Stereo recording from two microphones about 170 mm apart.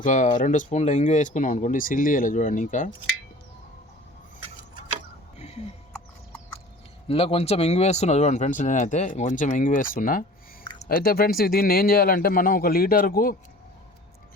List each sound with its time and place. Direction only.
0.0 s speech: 50° left (ahead or behind)
5.4 s music: 40° left (ahead or behind)
7.1 s speech: 35° left (ahead or behind); by 13.3 s 55° left (ahead or behind)